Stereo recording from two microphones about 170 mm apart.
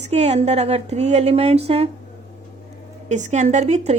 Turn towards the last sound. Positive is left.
turn(degrees=-40)  # may be behind; listen again after turning